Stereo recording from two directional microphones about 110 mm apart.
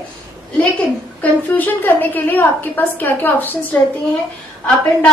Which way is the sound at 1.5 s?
15° left (ahead or behind).